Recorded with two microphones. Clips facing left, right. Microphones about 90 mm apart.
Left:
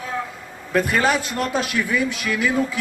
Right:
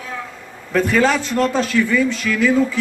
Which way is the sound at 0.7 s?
5° left (ahead or behind).